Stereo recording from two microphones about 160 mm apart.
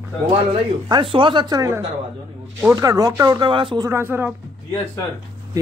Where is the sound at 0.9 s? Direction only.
35° right (ahead or behind).